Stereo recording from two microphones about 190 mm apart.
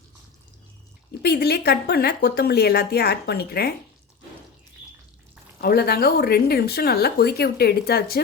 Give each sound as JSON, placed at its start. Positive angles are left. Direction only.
{"t": 1.2, "sound": "speech", "side_deg": 60}
{"t": 5.5, "sound": "speech", "side_deg": 50}